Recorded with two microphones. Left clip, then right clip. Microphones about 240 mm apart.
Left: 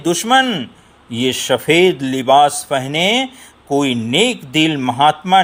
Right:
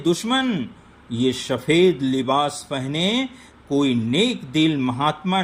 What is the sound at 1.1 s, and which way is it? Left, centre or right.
A man's voice, left.